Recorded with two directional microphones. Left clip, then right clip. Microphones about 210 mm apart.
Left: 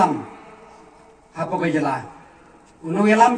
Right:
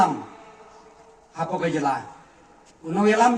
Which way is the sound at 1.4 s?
55° right (ahead or behind).